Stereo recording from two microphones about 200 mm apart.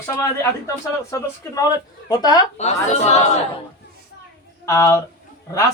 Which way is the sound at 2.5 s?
35° left (ahead or behind).